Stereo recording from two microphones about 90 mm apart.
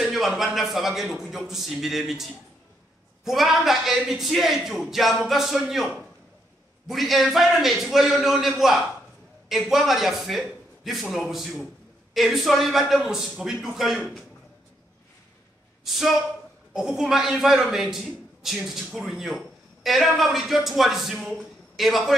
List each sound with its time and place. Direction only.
0.0 s a man's voice: centre (ahead or behind)
6.9 s a man's voice: centre (ahead or behind)
15.8 s a man's voice: 5° right (ahead or behind)